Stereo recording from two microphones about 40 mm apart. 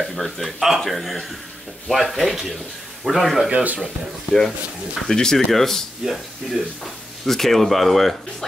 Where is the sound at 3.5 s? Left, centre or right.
Right.